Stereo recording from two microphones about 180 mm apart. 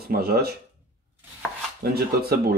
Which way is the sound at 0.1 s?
60° right (ahead or behind).